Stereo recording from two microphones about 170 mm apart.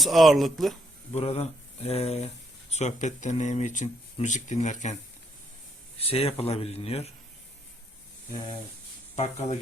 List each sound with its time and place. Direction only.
0.0 s speech: centre (ahead or behind)
1.1 s speech: 35° left (ahead or behind)
6.1 s speech: 35° left (ahead or behind)
9.1 s speech: 40° left (ahead or behind)